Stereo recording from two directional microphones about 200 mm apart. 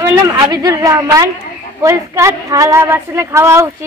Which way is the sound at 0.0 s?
15° right (ahead or behind).